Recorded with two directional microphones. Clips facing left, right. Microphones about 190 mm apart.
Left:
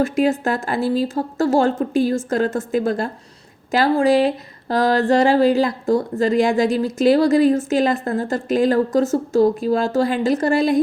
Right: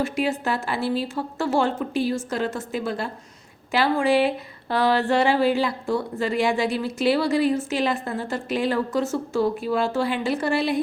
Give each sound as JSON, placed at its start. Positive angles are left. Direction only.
{"t": 0.0, "sound": "speech", "side_deg": 45}